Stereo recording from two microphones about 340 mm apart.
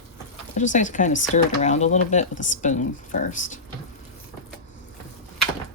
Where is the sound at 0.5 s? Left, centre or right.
Left.